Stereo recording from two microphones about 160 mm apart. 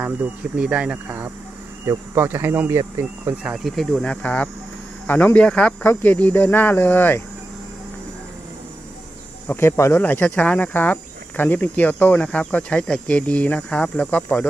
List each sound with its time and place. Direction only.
0.0 s speech: 5° right (ahead or behind); by 7.2 s 10° left (ahead or behind)
9.5 s speech: 15° left (ahead or behind)